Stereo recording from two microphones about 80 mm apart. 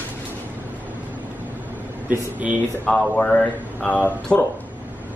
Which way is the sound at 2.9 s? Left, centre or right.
Centre.